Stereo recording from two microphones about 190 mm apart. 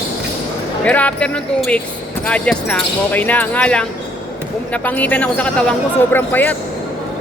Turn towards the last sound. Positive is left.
turn(degrees=10)  # may be behind; listen again after turning